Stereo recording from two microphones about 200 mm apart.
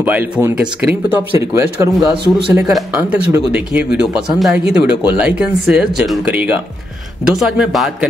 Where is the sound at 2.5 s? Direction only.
5° right (ahead or behind).